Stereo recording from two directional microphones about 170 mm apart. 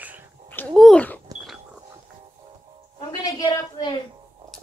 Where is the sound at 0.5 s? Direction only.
10° left (ahead or behind).